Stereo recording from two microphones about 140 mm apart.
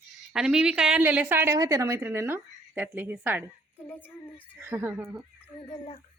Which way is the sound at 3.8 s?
10° left (ahead or behind).